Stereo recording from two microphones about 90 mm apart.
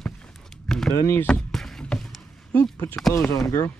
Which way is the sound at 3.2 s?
35° left (ahead or behind).